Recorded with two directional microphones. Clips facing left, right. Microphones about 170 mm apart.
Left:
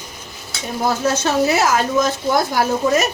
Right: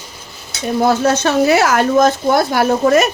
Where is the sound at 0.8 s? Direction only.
65° right (ahead or behind).